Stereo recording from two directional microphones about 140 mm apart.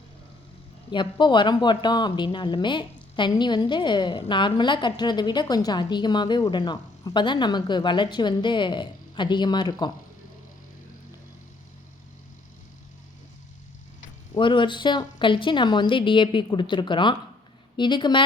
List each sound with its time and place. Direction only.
0.9 s speech: 35° left (ahead or behind)
14.3 s speech: 35° left (ahead or behind)